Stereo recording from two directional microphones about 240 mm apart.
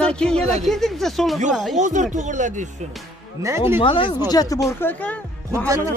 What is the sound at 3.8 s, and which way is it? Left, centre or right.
Speech, left.